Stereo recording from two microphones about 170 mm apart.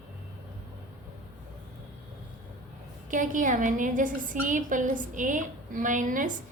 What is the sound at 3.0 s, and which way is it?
A woman's voice, 50° right (ahead or behind).